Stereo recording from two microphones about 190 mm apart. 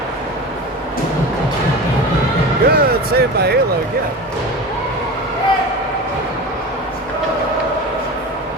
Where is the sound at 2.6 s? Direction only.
55° right (ahead or behind).